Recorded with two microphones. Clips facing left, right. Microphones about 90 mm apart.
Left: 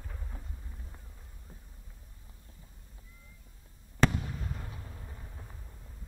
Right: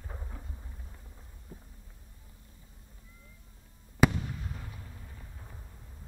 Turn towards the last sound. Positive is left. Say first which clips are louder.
# even
turn(degrees=0)  # may be behind; listen again after turning